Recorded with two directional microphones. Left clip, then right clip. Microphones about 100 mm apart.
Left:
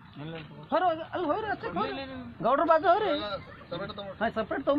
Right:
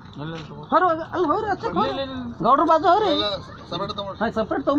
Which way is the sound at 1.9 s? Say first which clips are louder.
Right 10 dB; 5° right (ahead or behind).